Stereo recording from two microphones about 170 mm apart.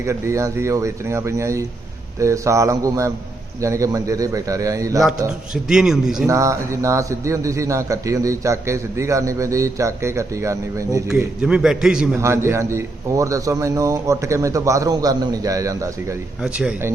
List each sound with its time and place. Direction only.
0.0 s a man's voice: 15° right (ahead or behind)
5.6 s a man's voice: 5° right (ahead or behind)
6.2 s a man's voice: 20° right (ahead or behind)
11.1 s a man's voice: 5° right (ahead or behind)
12.1 s a man's voice: 15° right (ahead or behind)
16.4 s a man's voice: 5° right (ahead or behind)